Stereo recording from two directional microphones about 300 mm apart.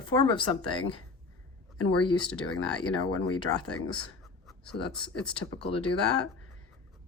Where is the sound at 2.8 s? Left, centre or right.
Left.